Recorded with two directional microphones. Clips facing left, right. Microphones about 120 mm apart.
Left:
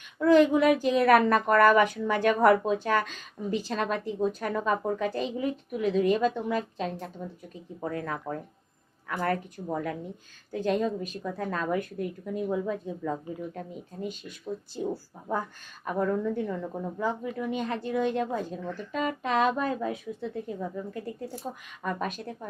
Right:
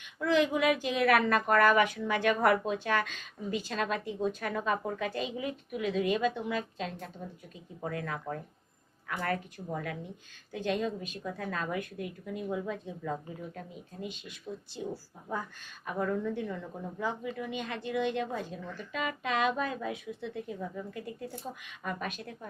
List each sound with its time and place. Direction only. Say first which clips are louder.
0.2 s a woman's voice: left 7 dB; 45° left (ahead or behind)
15.8 s a woman's voice: left 4 dB; 40° left (ahead or behind)
21.5 s speech: left 5 dB; 60° left (ahead or behind)
21.8 s a woman's voice: left 5 dB; 40° left (ahead or behind)